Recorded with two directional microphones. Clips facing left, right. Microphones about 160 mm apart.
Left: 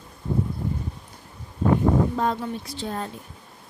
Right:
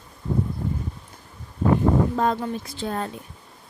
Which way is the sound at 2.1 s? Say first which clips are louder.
Right 2 dB; 50° right (ahead or behind).